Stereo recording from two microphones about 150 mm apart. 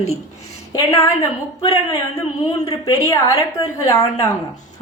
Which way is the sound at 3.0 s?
20° left (ahead or behind).